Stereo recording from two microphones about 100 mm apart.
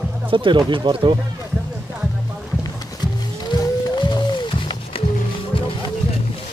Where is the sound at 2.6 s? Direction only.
45° left (ahead or behind).